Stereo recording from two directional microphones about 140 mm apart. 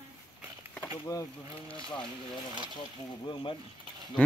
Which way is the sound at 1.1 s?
25° left (ahead or behind).